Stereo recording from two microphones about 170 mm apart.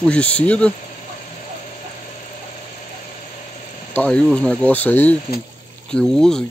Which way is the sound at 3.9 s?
5° left (ahead or behind).